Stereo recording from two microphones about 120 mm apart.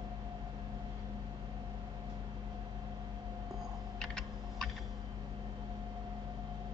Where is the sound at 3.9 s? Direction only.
5° left (ahead or behind).